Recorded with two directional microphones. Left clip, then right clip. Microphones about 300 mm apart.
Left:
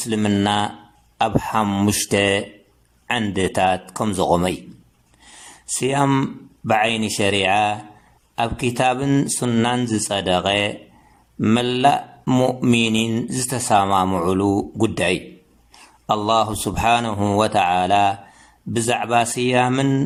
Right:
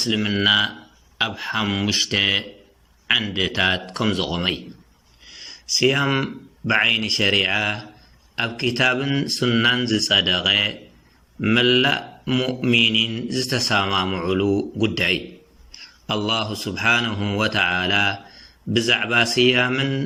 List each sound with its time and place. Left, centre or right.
0.0 s a man's voice: centre
5.8 s speech: centre